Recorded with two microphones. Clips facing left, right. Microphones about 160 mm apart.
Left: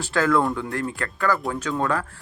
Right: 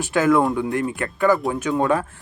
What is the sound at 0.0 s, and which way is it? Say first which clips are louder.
Speech: right 3 dB; 20° right (ahead or behind).